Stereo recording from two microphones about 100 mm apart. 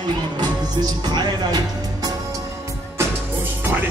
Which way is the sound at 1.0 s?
50° right (ahead or behind).